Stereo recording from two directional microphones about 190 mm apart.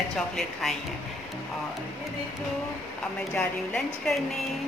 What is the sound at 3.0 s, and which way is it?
A woman's voice, 5° left (ahead or behind).